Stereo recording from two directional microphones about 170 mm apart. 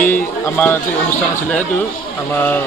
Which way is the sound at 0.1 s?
10° left (ahead or behind).